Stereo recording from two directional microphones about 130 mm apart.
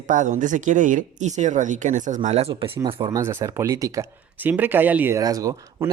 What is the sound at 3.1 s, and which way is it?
Speech, 20° right (ahead or behind).